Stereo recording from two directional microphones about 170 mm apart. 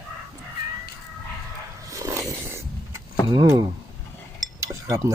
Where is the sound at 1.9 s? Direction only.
20° right (ahead or behind).